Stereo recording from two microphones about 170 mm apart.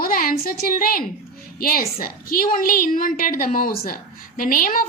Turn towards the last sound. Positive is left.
turn(degrees=55)  # may be behind; listen again after turning